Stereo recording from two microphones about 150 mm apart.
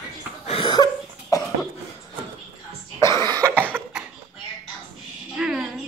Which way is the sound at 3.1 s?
30° right (ahead or behind).